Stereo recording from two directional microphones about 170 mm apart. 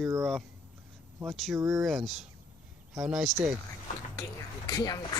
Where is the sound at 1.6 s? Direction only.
20° right (ahead or behind).